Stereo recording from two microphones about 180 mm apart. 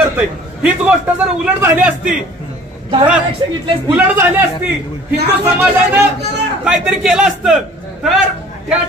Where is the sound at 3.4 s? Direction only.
25° right (ahead or behind).